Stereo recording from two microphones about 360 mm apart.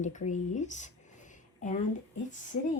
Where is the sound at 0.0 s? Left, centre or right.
Centre.